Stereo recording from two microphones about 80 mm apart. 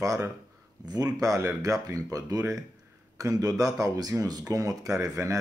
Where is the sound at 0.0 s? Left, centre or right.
Right.